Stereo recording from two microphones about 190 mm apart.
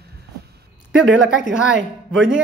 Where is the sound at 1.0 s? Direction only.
75° right (ahead or behind).